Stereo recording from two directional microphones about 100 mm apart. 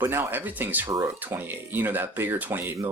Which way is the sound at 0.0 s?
20° right (ahead or behind).